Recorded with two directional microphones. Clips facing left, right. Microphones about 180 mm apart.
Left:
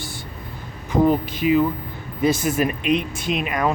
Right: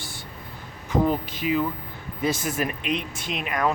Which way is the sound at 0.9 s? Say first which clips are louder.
Left 5 dB; 15° left (ahead or behind).